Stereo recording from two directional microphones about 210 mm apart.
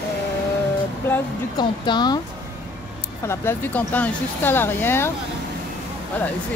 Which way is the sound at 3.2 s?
10° left (ahead or behind).